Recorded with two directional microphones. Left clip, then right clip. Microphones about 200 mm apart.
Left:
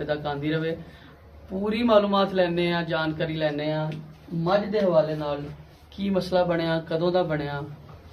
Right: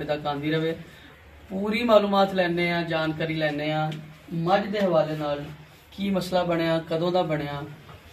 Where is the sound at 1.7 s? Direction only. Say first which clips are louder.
Right 1 dB; 10° left (ahead or behind).